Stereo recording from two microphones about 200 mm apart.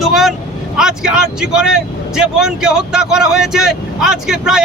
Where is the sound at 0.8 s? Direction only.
5° right (ahead or behind).